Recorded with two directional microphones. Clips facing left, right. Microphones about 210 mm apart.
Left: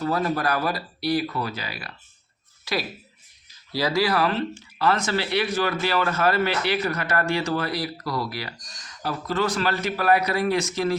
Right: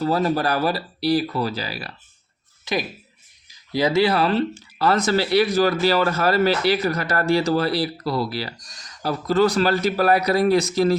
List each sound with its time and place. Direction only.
0.0 s speech: 30° right (ahead or behind)
2.7 s speech: 20° right (ahead or behind); by 10.9 s 35° right (ahead or behind)